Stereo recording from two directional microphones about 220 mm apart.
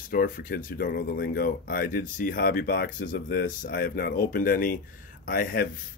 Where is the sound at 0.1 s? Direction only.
40° left (ahead or behind).